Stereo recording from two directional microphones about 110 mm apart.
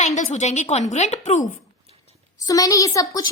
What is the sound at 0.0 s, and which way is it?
A woman's voice, 90° left.